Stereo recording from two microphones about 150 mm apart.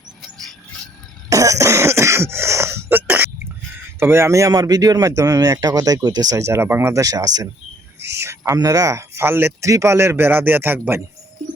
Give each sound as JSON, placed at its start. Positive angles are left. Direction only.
{"t": 0.2, "sound": "a sound", "side_deg": 0}
{"t": 1.3, "sound": "cough", "side_deg": -20}
{"t": 4.0, "sound": "a man's voice", "side_deg": -15}